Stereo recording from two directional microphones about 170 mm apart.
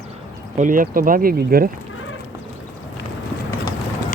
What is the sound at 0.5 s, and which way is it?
Speech, 50° right (ahead or behind).